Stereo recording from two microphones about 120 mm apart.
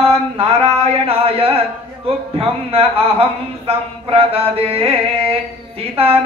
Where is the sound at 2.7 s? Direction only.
55° right (ahead or behind).